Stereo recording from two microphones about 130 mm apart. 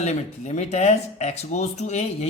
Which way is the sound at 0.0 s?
60° left (ahead or behind).